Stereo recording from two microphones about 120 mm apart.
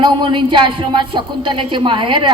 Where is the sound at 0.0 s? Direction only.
40° right (ahead or behind).